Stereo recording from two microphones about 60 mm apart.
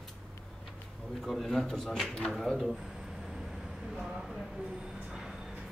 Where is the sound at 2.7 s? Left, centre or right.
Centre.